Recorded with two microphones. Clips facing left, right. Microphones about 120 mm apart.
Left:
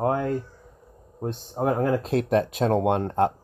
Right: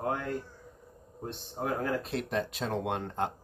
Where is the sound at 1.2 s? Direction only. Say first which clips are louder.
Left 9 dB; 50° left (ahead or behind).